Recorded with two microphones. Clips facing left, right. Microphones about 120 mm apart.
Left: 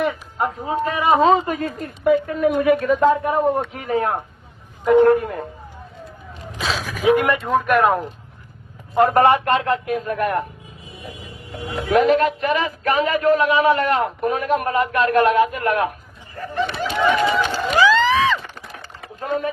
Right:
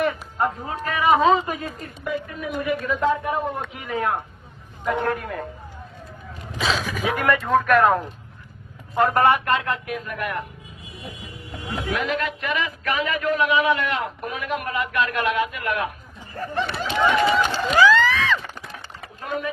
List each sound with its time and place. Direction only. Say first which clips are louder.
0.0 s speech: left 1 dB; 15° left (ahead or behind)
1.0 s speech: left 2 dB; 35° left (ahead or behind)
1.4 s a woman's voice: left 5 dB; 55° left (ahead or behind); by 4.2 s 35° left (ahead or behind)
4.9 s a man's voice: left 11 dB; 20° left (ahead or behind)
6.6 s speech: right 1 dB; centre (ahead or behind)
7.1 s speech: left 4 dB; 20° left (ahead or behind)
9.0 s speech: left 4 dB; 25° left (ahead or behind)
11.9 s speech: left 10 dB; 40° left (ahead or behind)
16.3 s a sound: left 2 dB; 35° right (ahead or behind)
17.7 s a sound: left 2 dB; 20° left (ahead or behind)
19.0 s a sound: left 5 dB; 35° left (ahead or behind)